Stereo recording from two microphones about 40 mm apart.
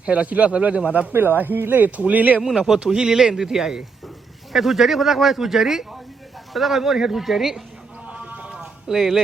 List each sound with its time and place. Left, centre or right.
0.0 s a man's voice: right
1.1 s speech: right
2.0 s a man's voice: right
2.6 s speech: centre
8.0 s a sound: right
9.0 s speech: centre